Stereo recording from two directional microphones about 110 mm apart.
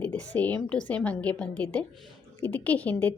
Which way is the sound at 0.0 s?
15° left (ahead or behind).